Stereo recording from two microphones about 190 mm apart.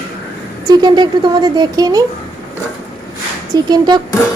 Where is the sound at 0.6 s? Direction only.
20° right (ahead or behind).